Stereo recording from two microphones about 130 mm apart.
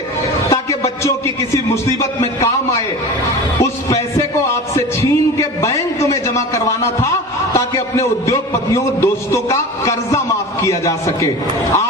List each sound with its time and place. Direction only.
0.5 s music: 20° left (ahead or behind)
1.7 s a man's voice: 25° left (ahead or behind)
3.6 s a sound: 25° left (ahead or behind)
7.5 s a man's voice: 25° left (ahead or behind)